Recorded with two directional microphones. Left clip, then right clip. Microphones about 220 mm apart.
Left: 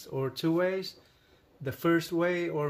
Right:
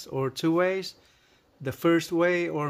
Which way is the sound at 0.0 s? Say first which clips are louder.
Right 4 dB; 50° right (ahead or behind).